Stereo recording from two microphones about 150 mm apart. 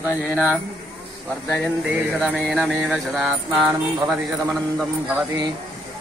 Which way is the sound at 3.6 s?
10° right (ahead or behind).